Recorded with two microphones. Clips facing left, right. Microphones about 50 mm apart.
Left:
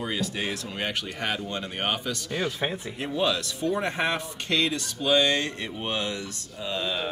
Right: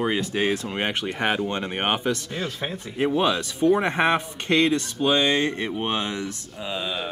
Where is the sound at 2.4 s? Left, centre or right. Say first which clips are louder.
Left 1 dB; centre.